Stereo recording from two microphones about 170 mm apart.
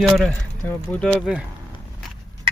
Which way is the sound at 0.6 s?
5° left (ahead or behind).